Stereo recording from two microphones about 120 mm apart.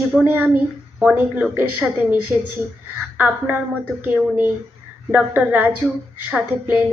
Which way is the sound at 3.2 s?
15° right (ahead or behind).